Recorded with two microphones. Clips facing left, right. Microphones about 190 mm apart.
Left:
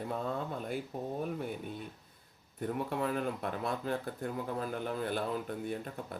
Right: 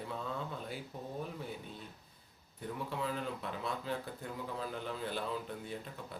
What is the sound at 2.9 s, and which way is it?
Speech, 55° left (ahead or behind).